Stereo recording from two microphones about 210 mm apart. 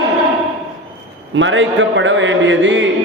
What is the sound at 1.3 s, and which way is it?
A man's voice, 65° right (ahead or behind).